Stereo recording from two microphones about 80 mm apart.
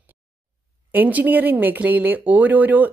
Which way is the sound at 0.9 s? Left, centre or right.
Right.